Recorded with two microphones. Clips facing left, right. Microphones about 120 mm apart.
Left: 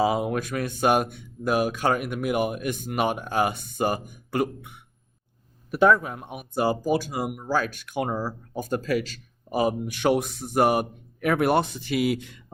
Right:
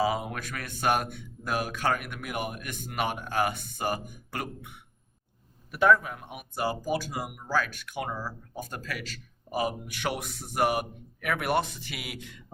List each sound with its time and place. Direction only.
0.0 s speech: 25° left (ahead or behind)
5.7 s a man's voice: 30° left (ahead or behind)